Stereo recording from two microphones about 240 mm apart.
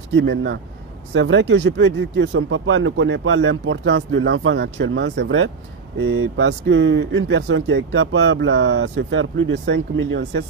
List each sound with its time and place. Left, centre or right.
0.1 s speech: right